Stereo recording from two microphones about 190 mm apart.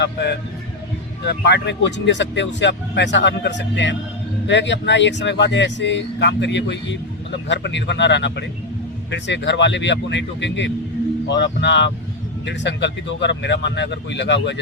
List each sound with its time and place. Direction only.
0.0 s speech: 60° left (ahead or behind)